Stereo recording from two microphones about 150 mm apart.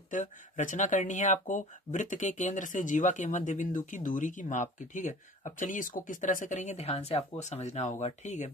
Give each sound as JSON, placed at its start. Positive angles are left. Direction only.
{"t": 0.1, "sound": "speech", "side_deg": 55}